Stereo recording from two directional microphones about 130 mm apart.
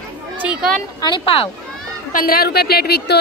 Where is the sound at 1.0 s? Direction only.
35° left (ahead or behind).